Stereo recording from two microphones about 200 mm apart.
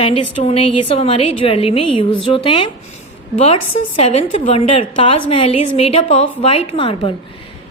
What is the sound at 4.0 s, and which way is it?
A woman's voice, 30° left (ahead or behind).